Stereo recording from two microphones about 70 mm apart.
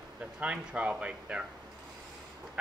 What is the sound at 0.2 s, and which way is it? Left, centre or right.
Speech, centre.